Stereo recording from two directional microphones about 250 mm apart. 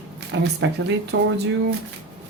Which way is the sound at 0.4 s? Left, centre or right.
Right.